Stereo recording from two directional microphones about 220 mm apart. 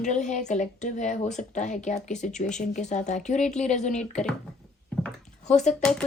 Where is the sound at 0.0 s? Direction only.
35° left (ahead or behind).